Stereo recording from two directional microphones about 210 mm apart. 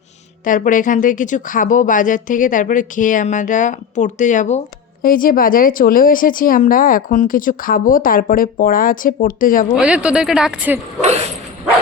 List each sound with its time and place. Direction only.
0.4 s speech: 40° left (ahead or behind)
9.7 s speech: 5° right (ahead or behind)